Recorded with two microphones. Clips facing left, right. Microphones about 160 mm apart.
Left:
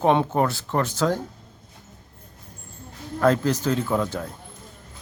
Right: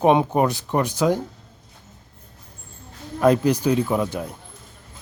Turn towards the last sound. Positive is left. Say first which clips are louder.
# right 1 dB
turn(degrees=-15)  # may be behind; listen again after turning